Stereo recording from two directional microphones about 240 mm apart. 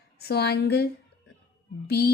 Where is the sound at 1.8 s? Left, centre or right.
Left.